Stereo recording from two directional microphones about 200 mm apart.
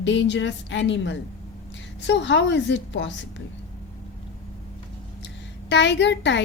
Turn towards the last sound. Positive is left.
turn(degrees=60)  # may be behind; listen again after turning